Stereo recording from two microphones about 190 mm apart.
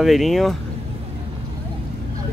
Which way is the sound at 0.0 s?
Centre (ahead or behind).